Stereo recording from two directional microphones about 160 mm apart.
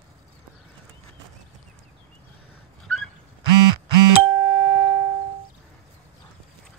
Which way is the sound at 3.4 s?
30° right (ahead or behind).